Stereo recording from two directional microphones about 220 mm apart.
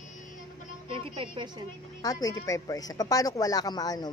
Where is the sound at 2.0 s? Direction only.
15° left (ahead or behind).